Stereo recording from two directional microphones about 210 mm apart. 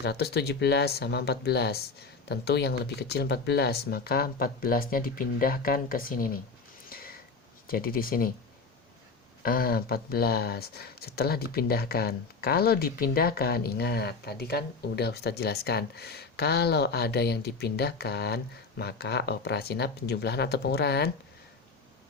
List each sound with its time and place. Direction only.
0.0 s speech: 50° left (ahead or behind)
6.9 s a sound: 45° left (ahead or behind)
7.7 s speech: 45° left (ahead or behind)
9.4 s speech: 45° left (ahead or behind)